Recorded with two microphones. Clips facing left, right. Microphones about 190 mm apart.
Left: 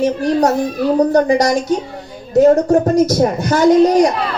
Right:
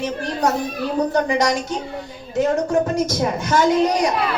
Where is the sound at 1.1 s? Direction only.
35° left (ahead or behind).